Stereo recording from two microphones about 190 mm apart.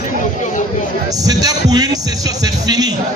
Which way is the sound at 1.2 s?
20° right (ahead or behind).